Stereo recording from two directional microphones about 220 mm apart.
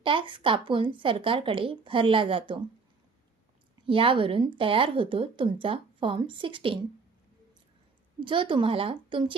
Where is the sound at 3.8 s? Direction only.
25° right (ahead or behind).